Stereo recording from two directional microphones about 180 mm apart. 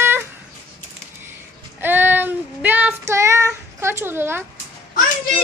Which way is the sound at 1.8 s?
10° right (ahead or behind).